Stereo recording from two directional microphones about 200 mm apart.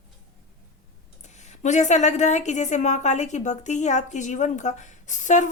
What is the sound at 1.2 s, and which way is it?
A woman's voice, 35° left (ahead or behind).